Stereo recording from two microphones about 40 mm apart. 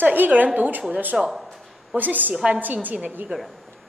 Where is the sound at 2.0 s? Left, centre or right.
Right.